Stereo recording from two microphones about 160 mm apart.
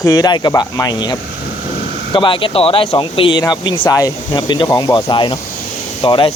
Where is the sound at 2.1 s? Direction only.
30° left (ahead or behind).